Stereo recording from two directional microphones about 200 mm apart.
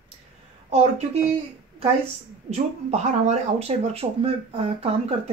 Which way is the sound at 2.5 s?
35° right (ahead or behind).